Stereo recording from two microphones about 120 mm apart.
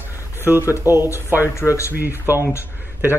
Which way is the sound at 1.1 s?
25° left (ahead or behind).